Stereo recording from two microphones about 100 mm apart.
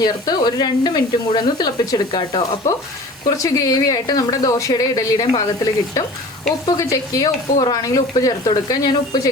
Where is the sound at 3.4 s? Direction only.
35° left (ahead or behind).